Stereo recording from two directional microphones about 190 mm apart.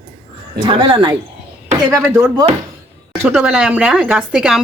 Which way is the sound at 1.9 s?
15° right (ahead or behind).